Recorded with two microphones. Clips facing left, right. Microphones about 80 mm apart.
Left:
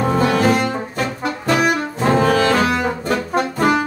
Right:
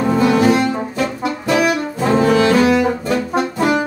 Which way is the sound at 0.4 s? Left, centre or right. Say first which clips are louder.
Right 2 dB; left.